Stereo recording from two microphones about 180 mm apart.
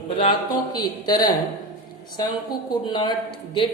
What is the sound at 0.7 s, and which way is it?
Speech, 25° left (ahead or behind).